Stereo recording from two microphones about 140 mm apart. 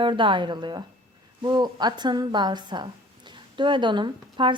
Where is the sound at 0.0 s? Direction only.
35° right (ahead or behind).